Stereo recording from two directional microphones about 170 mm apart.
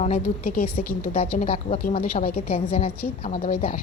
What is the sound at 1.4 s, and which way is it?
Speech, 35° left (ahead or behind).